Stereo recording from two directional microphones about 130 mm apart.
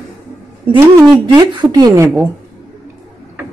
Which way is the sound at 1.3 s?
30° right (ahead or behind).